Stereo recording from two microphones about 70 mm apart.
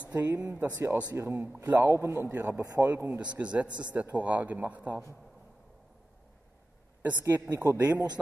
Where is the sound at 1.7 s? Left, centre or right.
Right.